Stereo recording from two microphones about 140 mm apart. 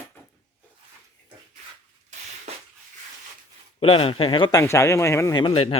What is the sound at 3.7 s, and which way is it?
Speech, 45° left (ahead or behind).